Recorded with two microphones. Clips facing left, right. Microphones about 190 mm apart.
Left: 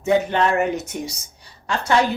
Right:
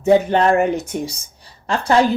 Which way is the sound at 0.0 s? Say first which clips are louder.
Right 5 dB; 35° right (ahead or behind).